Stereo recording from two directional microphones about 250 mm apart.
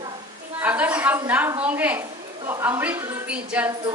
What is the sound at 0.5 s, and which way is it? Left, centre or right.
A woman's voice, centre.